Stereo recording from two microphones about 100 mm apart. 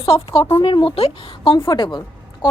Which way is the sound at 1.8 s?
50° left (ahead or behind).